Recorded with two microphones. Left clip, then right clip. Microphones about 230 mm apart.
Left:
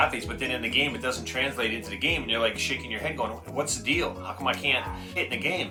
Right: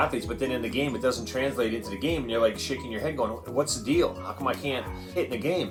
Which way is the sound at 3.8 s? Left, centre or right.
Left.